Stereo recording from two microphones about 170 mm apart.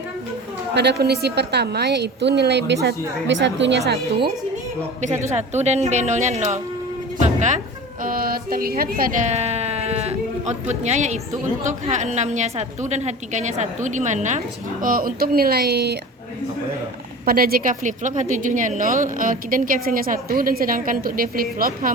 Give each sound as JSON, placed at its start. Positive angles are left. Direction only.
{"t": 0.7, "sound": "a woman's voice", "side_deg": -80}
{"t": 5.3, "sound": "a woman's voice", "side_deg": -40}
{"t": 8.0, "sound": "a woman's voice", "side_deg": -60}
{"t": 17.2, "sound": "a woman's voice", "side_deg": -60}